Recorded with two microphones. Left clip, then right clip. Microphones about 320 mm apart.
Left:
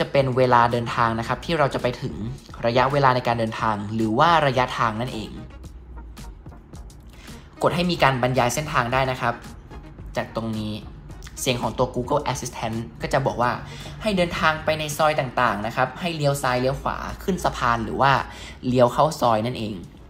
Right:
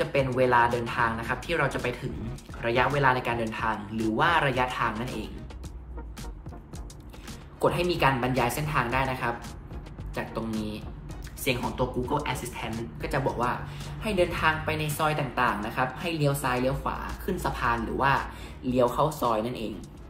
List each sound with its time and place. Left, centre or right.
0.0 s a woman's voice: centre
7.5 s a woman's voice: left